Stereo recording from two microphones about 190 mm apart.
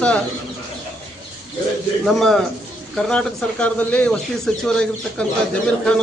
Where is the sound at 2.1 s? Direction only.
Centre (ahead or behind).